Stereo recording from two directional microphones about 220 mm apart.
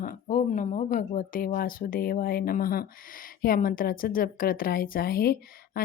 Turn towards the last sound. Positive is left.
turn(degrees=45)  # may be behind; listen again after turning